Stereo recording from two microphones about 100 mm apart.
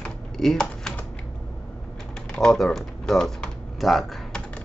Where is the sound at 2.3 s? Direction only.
5° left (ahead or behind).